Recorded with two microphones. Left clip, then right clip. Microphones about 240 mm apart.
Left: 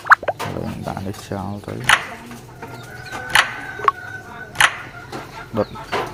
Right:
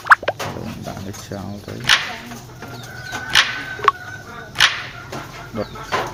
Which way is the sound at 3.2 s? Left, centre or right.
Centre.